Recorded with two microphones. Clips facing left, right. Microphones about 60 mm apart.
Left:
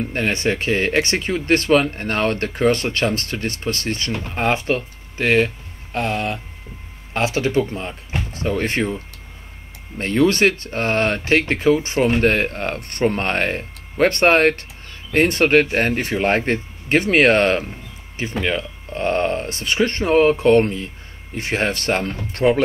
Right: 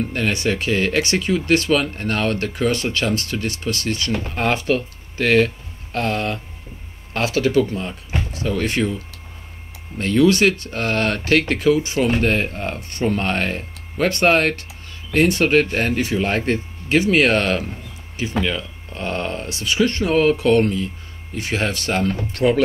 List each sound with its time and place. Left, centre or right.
0.1 s speech: left
4.3 s speech: left